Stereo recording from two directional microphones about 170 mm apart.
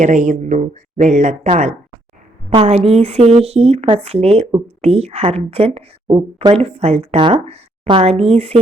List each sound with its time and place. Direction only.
0.0 s speech: 45° right (ahead or behind)